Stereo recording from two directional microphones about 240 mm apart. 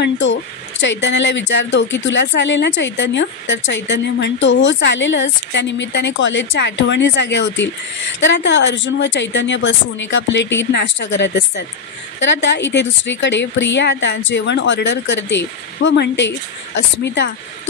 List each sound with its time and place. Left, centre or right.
0.0 s speech: left